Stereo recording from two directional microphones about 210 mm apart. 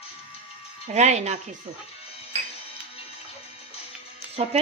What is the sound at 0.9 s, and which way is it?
Speech, 35° right (ahead or behind).